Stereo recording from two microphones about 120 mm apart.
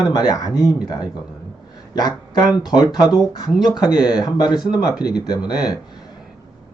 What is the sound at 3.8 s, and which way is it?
Speech, 5° right (ahead or behind).